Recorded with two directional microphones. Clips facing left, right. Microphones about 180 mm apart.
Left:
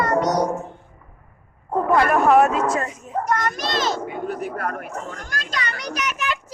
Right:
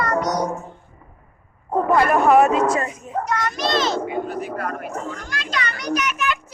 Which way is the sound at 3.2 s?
50° left (ahead or behind).